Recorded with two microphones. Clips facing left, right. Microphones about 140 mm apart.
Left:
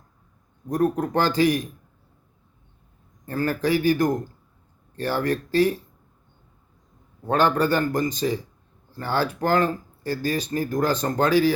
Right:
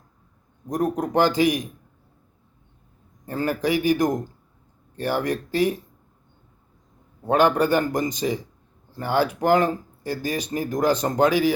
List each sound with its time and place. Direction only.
0.7 s speech: 15° right (ahead or behind)
3.2 s speech: 15° right (ahead or behind)
7.3 s speech: 15° right (ahead or behind)